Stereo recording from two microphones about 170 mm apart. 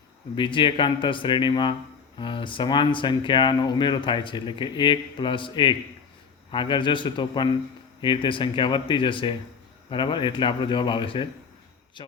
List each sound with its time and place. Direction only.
0.3 s speech: 30° left (ahead or behind)